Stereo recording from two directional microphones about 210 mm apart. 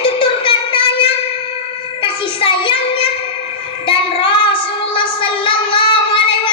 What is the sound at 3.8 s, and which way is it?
Child singing, 25° left (ahead or behind).